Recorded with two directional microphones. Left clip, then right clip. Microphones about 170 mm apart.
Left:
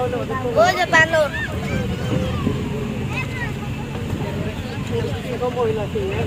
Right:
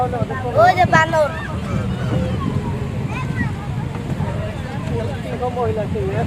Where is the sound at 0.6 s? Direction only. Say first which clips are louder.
Right 2 dB; 85° right.